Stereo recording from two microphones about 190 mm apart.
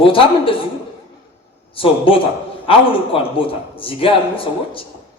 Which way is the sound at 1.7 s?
30° left (ahead or behind).